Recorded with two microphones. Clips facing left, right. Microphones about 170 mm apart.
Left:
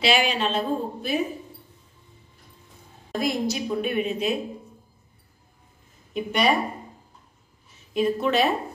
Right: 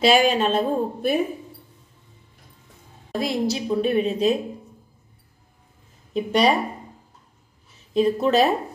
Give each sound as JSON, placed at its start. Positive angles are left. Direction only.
{"t": 0.0, "sound": "speech", "side_deg": -45}
{"t": 3.1, "sound": "a woman's voice", "side_deg": -30}
{"t": 6.1, "sound": "a woman's voice", "side_deg": -35}
{"t": 7.9, "sound": "a woman's voice", "side_deg": -35}